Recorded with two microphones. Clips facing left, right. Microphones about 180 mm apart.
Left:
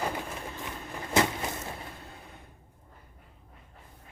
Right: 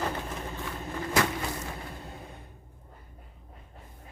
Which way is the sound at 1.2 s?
20° left (ahead or behind).